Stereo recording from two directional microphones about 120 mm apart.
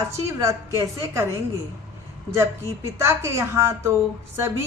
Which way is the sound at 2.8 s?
25° right (ahead or behind).